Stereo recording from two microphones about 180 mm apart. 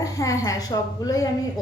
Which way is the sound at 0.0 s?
20° left (ahead or behind).